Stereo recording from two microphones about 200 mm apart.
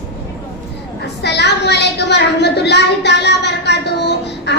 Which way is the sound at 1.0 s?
55° left (ahead or behind).